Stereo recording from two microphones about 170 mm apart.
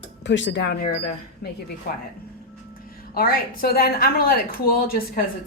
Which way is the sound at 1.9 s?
65° left (ahead or behind).